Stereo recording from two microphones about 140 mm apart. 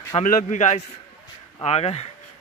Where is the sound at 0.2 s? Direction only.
65° left (ahead or behind).